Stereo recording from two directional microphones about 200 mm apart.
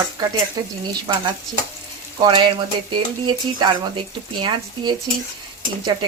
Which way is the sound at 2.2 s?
25° right (ahead or behind).